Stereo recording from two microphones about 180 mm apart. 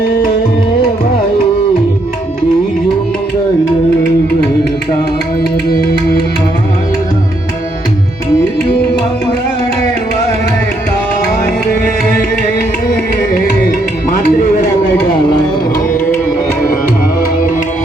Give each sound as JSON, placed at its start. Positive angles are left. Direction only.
{"t": 5.4, "sound": "music", "side_deg": 60}
{"t": 11.7, "sound": "music", "side_deg": 55}
{"t": 15.3, "sound": "music", "side_deg": 25}